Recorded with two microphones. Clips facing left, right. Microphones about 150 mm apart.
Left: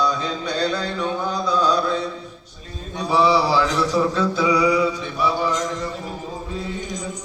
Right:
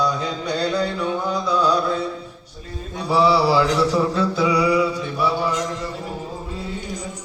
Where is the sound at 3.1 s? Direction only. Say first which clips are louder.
Right 1 dB; 10° right (ahead or behind).